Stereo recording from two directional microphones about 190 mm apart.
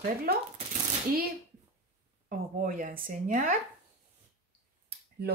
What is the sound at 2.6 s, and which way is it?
Speech, 45° right (ahead or behind).